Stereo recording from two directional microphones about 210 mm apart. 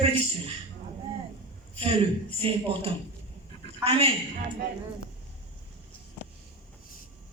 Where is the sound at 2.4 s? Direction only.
25° right (ahead or behind).